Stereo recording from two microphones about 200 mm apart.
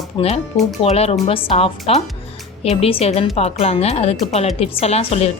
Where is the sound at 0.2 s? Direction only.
25° left (ahead or behind).